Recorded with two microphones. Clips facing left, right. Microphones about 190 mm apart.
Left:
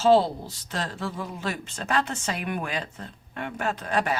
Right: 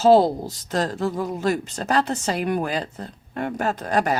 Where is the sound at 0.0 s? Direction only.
40° right (ahead or behind).